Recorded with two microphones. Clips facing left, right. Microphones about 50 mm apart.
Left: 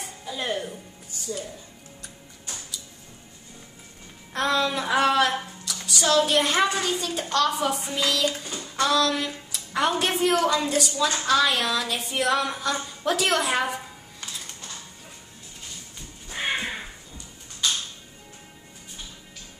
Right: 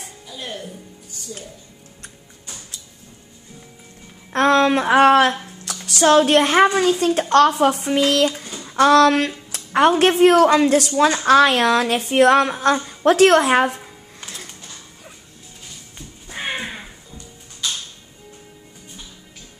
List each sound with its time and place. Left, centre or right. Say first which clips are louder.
0.5 s speech: left 3 dB; centre
4.3 s a child's voice: right 9 dB; right
8.3 s child singing: right 3 dB; centre
8.7 s a child's voice: right 10 dB; right
16.3 s crow: right 1 dB; centre